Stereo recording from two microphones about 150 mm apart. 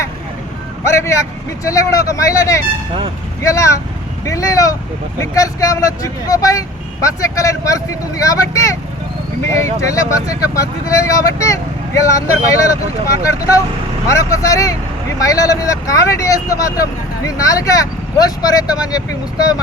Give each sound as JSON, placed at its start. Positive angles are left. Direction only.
{"t": 0.9, "sound": "speech", "side_deg": 20}
{"t": 9.8, "sound": "speech", "side_deg": 20}